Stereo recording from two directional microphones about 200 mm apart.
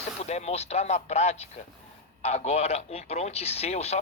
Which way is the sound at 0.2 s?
35° left (ahead or behind).